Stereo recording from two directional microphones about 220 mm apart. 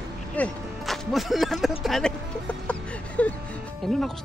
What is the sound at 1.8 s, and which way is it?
Speech, centre (ahead or behind).